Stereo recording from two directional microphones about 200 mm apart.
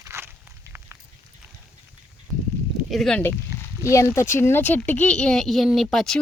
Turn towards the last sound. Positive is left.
turn(degrees=0)  # may be behind; listen again after turning